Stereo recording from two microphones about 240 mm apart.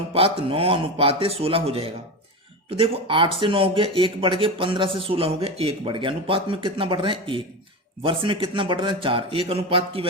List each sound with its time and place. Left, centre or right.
0.1 s speech: right